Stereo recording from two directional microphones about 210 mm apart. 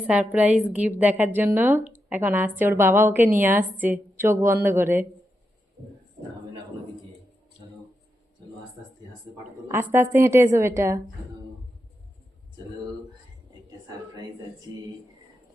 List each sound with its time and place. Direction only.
0.1 s a woman's voice: 5° right (ahead or behind)
9.7 s a woman's voice: 10° right (ahead or behind)
14.7 s a woman's voice: 20° right (ahead or behind)